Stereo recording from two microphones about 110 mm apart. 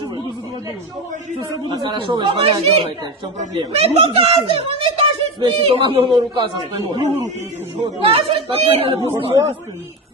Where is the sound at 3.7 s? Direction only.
70° right (ahead or behind); by 7.0 s 40° right (ahead or behind).